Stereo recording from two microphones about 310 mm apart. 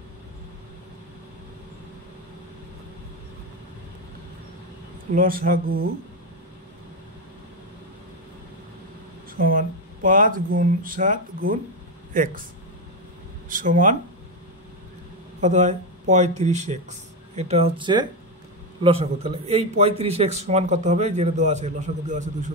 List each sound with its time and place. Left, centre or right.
5.1 s a man's voice: right
9.4 s a man's voice: right
13.5 s a man's voice: right
15.4 s a man's voice: right